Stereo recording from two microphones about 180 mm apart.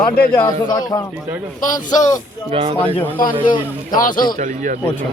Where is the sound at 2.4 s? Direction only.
30° right (ahead or behind).